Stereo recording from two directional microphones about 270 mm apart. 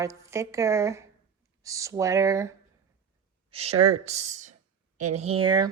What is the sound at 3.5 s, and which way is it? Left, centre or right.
Speech, right.